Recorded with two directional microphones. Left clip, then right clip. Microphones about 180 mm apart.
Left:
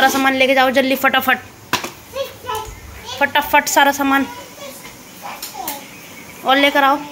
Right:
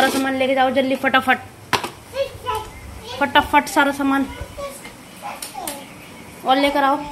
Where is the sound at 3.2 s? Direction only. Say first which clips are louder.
Left 1 dB; 5° right (ahead or behind).